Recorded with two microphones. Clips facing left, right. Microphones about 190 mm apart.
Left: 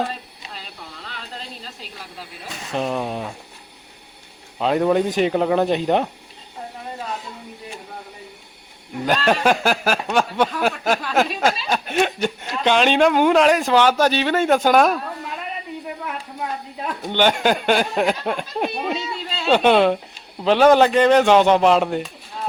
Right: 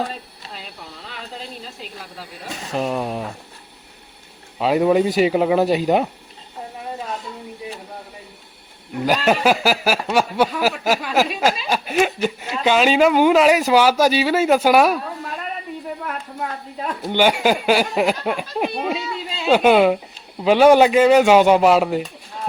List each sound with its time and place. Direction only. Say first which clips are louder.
2.7 s speech: right 1 dB; 5° right (ahead or behind)
4.5 s speech: right 2 dB; 5° right (ahead or behind)
9.0 s speech: right 1 dB; 5° right (ahead or behind)
17.1 s speech: right 1 dB; 10° right (ahead or behind)